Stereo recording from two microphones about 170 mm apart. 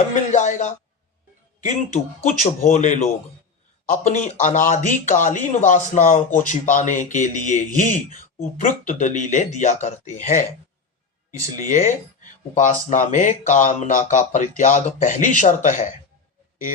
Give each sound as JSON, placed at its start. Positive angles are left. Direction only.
{"t": 0.1, "sound": "speech", "side_deg": 45}
{"t": 11.5, "sound": "speech", "side_deg": 50}